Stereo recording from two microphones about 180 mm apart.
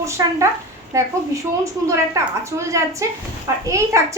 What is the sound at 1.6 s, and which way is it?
A woman's voice, 15° right (ahead or behind).